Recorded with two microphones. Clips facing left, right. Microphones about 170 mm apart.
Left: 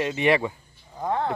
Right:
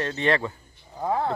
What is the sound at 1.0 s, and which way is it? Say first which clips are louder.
Speech: right 1 dB; 5° right (ahead or behind).